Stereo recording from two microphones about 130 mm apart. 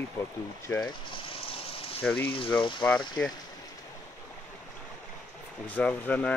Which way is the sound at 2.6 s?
40° left (ahead or behind).